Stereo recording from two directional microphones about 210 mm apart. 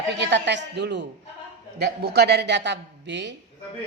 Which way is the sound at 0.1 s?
55° right (ahead or behind).